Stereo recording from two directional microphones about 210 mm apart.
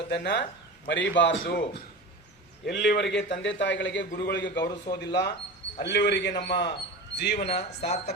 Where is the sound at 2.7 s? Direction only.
55° left (ahead or behind).